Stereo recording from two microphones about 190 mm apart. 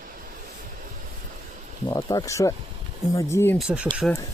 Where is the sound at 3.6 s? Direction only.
5° right (ahead or behind).